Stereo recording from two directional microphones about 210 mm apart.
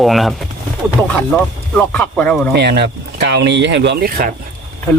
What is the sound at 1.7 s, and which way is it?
Speech, 5° left (ahead or behind).